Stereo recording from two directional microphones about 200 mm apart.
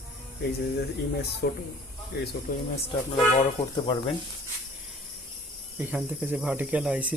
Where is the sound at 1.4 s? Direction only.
55° left (ahead or behind).